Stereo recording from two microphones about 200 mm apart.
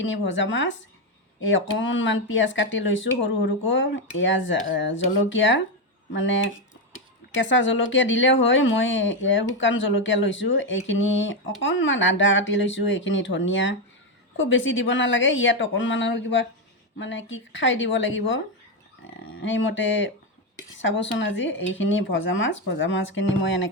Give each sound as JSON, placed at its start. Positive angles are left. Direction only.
{"t": 0.0, "sound": "speech", "side_deg": 70}
{"t": 7.4, "sound": "speech", "side_deg": 70}
{"t": 19.4, "sound": "speech", "side_deg": 70}